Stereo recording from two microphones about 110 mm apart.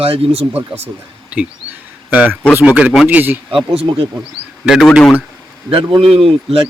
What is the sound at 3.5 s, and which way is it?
Speech, 55° right (ahead or behind).